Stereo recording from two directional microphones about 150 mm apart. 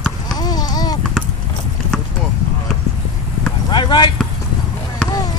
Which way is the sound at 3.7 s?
30° left (ahead or behind).